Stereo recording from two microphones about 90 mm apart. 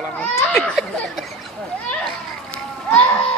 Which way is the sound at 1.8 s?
10° left (ahead or behind).